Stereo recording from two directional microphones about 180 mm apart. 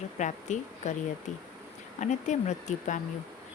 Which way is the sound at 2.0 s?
40° left (ahead or behind).